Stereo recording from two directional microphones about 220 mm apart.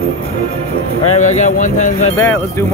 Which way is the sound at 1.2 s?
35° left (ahead or behind).